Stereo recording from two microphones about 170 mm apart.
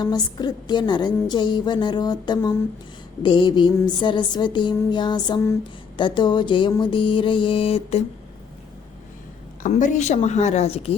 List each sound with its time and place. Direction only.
0.0 s a woman's voice: 25° left (ahead or behind)
9.6 s a woman's voice: 45° left (ahead or behind)